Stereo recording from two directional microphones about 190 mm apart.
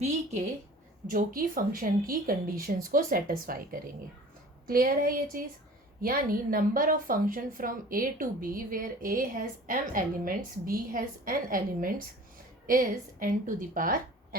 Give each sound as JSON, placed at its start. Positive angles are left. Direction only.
{"t": 1.1, "sound": "a woman's voice", "side_deg": -50}